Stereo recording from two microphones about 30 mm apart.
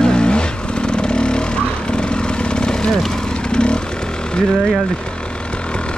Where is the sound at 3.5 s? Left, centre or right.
Left.